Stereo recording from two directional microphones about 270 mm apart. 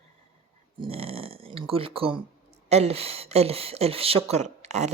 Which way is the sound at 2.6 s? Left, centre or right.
Right.